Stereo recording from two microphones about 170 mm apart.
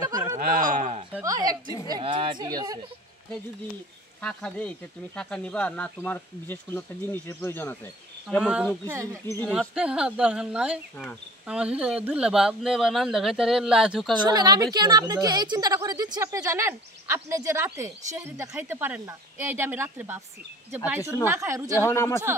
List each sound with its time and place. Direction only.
0.0 s a sound: 20° right (ahead or behind)
0.4 s a sound: 50° right (ahead or behind)
1.2 s a woman's voice: 20° right (ahead or behind)
4.2 s speech: 5° left (ahead or behind)
8.4 s speech: 5° right (ahead or behind)
9.4 s speech: centre (ahead or behind)
14.2 s a woman's voice: 25° right (ahead or behind)
21.7 s speech: 15° left (ahead or behind)